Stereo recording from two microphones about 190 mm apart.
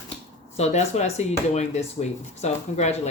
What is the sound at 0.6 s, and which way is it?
Speech, 35° left (ahead or behind).